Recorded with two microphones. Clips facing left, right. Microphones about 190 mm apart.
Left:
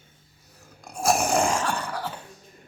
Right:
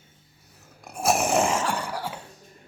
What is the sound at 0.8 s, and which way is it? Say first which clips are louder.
Dog: even; 5° right (ahead or behind).